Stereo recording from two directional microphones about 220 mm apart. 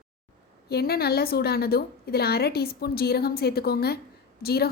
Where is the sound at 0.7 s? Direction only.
45° left (ahead or behind).